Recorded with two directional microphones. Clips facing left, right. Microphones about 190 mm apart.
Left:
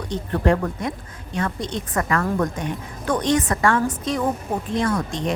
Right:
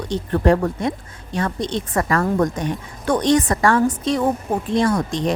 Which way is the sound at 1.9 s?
35° right (ahead or behind).